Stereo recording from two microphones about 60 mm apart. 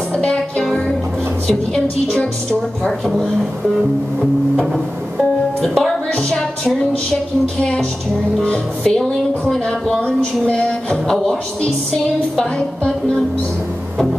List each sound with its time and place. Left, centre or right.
0.1 s music: centre
1.5 s speech: centre
5.6 s speech: centre
6.1 s music: centre
8.4 s speech: centre